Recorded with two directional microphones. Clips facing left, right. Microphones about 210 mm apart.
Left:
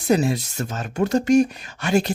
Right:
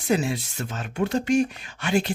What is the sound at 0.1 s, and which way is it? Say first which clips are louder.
Speech: left 4 dB; 40° left (ahead or behind).